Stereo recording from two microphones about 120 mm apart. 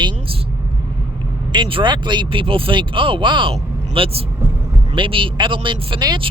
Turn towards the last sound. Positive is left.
turn(degrees=-40)  # may be behind; listen again after turning